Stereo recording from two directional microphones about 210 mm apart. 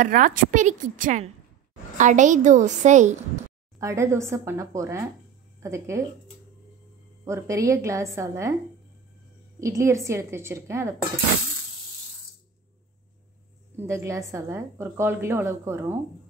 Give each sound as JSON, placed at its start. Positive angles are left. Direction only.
{"t": 0.0, "sound": "a woman's voice", "side_deg": -40}
{"t": 3.8, "sound": "a woman's voice", "side_deg": -15}
{"t": 7.2, "sound": "a woman's voice", "side_deg": -15}
{"t": 9.6, "sound": "a woman's voice", "side_deg": -15}
{"t": 13.7, "sound": "a woman's voice", "side_deg": -15}